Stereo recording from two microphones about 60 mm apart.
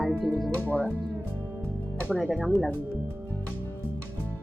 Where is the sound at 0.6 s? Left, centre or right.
Left.